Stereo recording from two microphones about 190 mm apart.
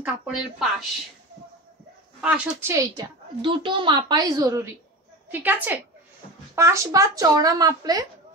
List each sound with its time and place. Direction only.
0.0 s a woman's voice: centre (ahead or behind)
2.2 s a woman's voice: 10° right (ahead or behind)